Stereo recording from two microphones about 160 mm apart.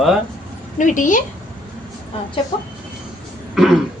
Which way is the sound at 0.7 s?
55° left (ahead or behind).